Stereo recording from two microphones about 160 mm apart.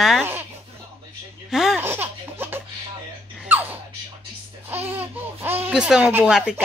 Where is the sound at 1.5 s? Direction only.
Centre (ahead or behind).